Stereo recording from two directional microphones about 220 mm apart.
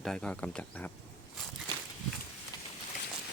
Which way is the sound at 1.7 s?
20° right (ahead or behind).